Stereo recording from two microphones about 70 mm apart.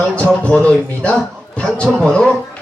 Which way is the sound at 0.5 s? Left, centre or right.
Centre.